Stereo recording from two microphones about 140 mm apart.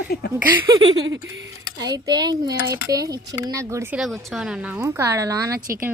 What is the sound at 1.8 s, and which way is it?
Speech, 30° right (ahead or behind).